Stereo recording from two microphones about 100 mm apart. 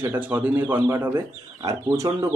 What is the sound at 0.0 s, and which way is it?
A man's voice, 20° right (ahead or behind).